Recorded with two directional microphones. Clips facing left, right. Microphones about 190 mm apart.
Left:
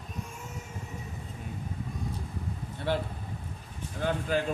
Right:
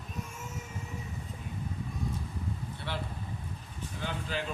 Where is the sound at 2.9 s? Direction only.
45° left (ahead or behind).